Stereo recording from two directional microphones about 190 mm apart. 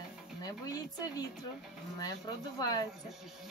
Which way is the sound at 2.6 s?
20° left (ahead or behind).